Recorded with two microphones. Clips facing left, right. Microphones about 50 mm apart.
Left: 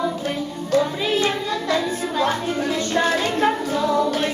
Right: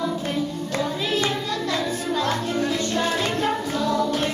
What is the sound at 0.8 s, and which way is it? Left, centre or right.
Child singing, centre.